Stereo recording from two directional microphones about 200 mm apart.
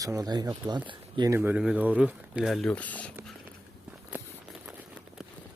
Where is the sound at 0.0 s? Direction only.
15° right (ahead or behind).